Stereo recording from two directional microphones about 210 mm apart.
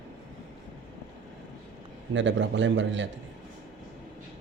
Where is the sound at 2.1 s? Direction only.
60° right (ahead or behind).